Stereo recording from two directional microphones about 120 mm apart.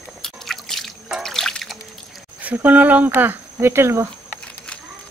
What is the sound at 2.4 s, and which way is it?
Speech, 10° right (ahead or behind).